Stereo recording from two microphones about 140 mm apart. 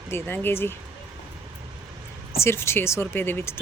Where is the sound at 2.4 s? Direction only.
20° left (ahead or behind).